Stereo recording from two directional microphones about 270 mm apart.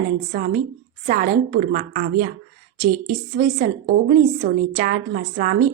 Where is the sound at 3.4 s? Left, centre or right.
Right.